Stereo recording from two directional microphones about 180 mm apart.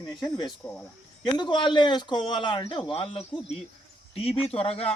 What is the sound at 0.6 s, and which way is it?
Speech, 10° left (ahead or behind).